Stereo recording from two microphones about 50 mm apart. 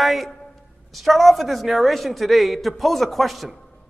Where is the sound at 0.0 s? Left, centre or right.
Centre.